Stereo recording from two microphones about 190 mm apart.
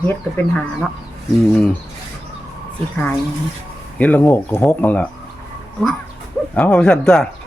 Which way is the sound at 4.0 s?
10° left (ahead or behind).